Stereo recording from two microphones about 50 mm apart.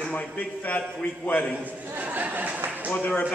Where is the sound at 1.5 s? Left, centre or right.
Right.